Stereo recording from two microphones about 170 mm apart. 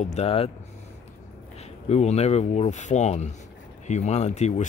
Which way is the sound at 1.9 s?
40° left (ahead or behind).